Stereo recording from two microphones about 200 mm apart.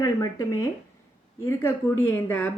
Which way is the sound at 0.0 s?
15° left (ahead or behind).